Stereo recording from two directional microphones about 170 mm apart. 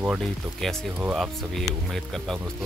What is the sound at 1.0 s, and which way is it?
Speech, centre (ahead or behind).